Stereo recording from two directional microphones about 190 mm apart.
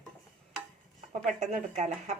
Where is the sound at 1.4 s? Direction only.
35° right (ahead or behind).